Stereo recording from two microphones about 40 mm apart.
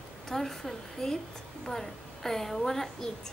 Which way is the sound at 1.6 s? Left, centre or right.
Centre.